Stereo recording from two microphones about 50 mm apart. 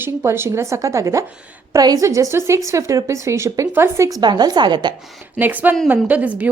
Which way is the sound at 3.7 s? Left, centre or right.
Right.